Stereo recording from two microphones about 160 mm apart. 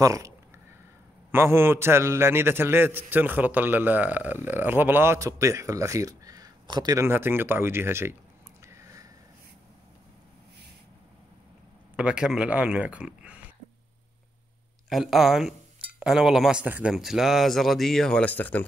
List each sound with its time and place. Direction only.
0.0 s speech: 20° right (ahead or behind)
1.3 s a man's voice: 15° right (ahead or behind)
8.6 s a sound: 20° right (ahead or behind)
12.0 s a man's voice: 5° right (ahead or behind)
14.9 s speech: centre (ahead or behind)